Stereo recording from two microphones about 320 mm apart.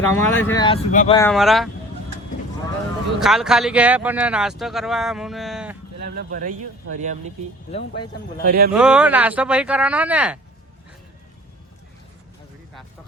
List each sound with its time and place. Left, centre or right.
0.1 s speech: centre
1.2 s speech: centre
3.2 s speech: centre
6.0 s speech: right
8.4 s speech: right
8.7 s speech: centre